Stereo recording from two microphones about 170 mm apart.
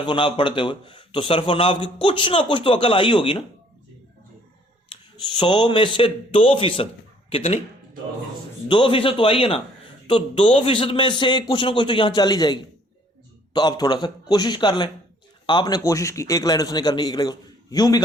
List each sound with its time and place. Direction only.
0.0 s a man's voice: 30° left (ahead or behind)
4.9 s a man's voice: 30° left (ahead or behind)
8.6 s a man's voice: 30° left (ahead or behind)